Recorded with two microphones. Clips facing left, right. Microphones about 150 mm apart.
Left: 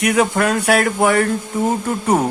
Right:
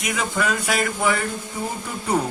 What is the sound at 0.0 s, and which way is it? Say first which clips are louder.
Speech: left 8 dB; 65° left (ahead or behind).